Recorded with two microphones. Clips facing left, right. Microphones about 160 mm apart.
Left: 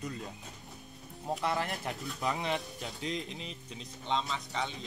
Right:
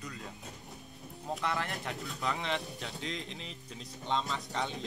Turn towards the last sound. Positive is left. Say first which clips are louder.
# even
turn(degrees=0)  # may be behind; listen again after turning